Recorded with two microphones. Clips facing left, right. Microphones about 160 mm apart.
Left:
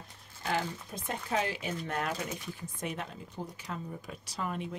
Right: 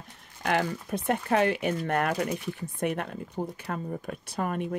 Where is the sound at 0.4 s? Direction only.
70° right (ahead or behind).